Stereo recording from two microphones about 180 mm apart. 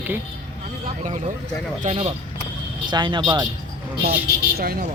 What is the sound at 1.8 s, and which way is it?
Speech, 35° right (ahead or behind).